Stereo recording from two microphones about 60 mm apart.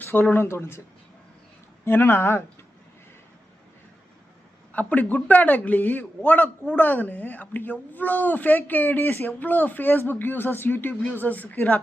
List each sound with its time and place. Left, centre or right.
0.0 s speech: left
1.8 s speech: left
4.7 s a man's voice: left